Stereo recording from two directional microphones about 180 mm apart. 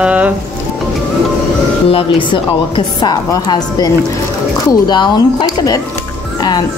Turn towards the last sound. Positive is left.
turn(degrees=20)  # may be behind; listen again after turning